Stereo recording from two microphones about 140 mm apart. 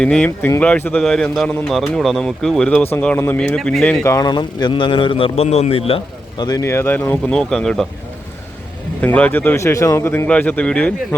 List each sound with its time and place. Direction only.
0.0 s speech: 5° left (ahead or behind)
0.3 s speech: 20° left (ahead or behind); by 4.0 s 5° left (ahead or behind)
4.0 s a man's voice: 25° left (ahead or behind); by 6.4 s 45° left (ahead or behind)
6.4 s speech: 30° left (ahead or behind)
6.7 s speech: 15° left (ahead or behind)
9.0 s speech: 10° left (ahead or behind)